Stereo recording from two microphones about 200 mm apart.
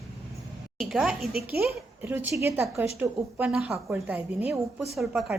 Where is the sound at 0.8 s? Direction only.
5° right (ahead or behind).